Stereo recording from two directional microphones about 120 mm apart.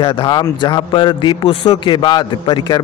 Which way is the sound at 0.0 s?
45° left (ahead or behind).